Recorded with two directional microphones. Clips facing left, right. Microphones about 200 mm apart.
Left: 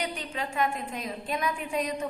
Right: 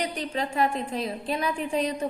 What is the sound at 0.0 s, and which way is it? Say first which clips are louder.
A woman's voice: right 4 dB; 35° right (ahead or behind).